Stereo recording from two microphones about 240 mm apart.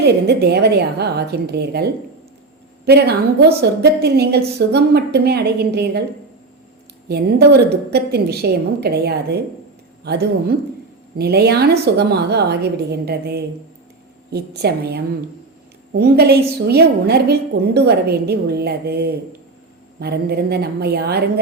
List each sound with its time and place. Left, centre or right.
0.0 s a woman's voice: right
7.1 s a woman's voice: right